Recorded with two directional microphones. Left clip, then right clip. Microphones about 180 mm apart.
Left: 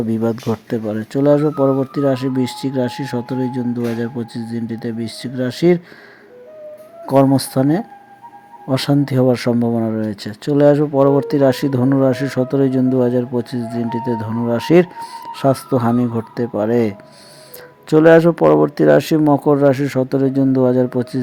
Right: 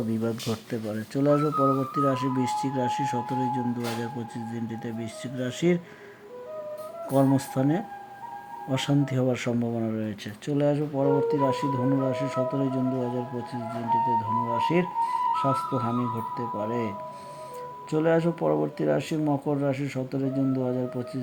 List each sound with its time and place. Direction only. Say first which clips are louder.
0.1 s speech: left 10 dB; 30° left (ahead or behind)
7.3 s speech: left 9 dB; 30° left (ahead or behind)
17.9 s speech: left 14 dB; 40° left (ahead or behind)